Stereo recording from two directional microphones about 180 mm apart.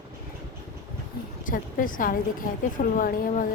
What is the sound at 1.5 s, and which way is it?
A woman's voice, 50° left (ahead or behind).